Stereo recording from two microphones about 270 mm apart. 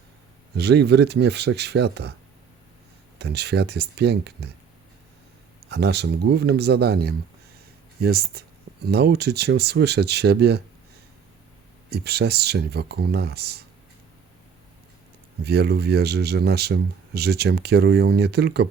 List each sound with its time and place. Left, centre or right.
0.5 s speech: right
3.2 s speech: right
5.6 s speech: right
11.9 s speech: right
15.4 s speech: right